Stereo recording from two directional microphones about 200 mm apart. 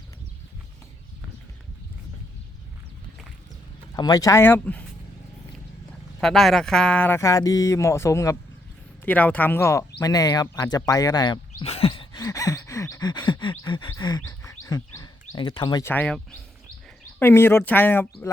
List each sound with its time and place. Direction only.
3.9 s speech: 20° left (ahead or behind)
6.1 s speech: centre (ahead or behind)
10.0 s a sound: 20° left (ahead or behind)
15.9 s speech: 5° left (ahead or behind)